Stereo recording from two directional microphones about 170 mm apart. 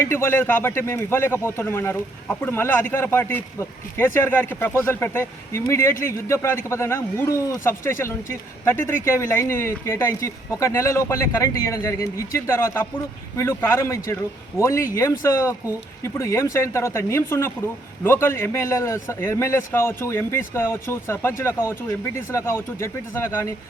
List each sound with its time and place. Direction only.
0.0 s speech: 15° left (ahead or behind)